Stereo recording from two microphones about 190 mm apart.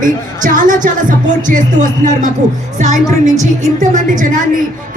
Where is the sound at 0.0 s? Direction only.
45° right (ahead or behind).